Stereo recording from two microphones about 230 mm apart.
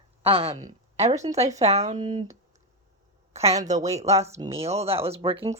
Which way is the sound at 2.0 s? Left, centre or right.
Centre.